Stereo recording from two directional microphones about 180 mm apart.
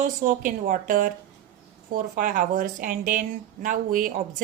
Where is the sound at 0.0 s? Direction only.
45° right (ahead or behind).